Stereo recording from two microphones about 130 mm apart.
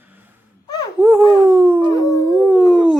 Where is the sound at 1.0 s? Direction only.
15° right (ahead or behind).